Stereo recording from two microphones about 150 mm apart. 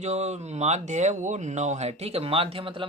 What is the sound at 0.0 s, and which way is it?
Speech, 50° right (ahead or behind).